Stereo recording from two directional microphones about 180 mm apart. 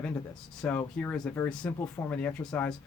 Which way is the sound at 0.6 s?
10° left (ahead or behind).